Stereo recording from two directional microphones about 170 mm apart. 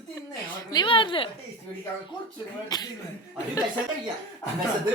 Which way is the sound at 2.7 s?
25° left (ahead or behind).